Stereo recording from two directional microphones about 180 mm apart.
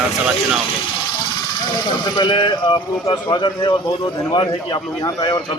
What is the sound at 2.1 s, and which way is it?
Speech, 25° left (ahead or behind).